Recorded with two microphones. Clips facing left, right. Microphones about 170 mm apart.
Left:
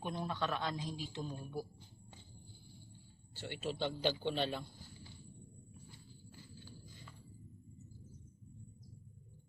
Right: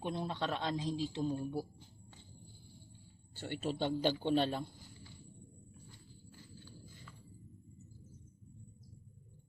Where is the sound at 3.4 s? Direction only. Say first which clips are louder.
Right 3 dB; 45° right (ahead or behind).